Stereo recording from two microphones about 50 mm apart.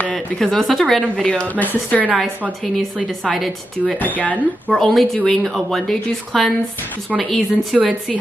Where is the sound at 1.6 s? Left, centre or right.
Left.